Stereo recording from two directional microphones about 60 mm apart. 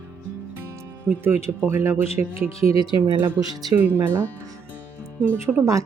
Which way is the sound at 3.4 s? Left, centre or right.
Right.